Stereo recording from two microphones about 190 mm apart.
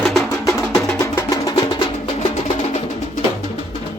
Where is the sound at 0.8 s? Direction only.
15° left (ahead or behind).